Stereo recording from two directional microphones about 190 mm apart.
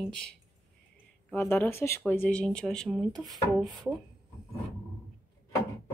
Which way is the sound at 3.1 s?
20° right (ahead or behind).